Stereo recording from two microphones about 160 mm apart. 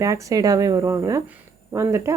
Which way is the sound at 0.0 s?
20° right (ahead or behind).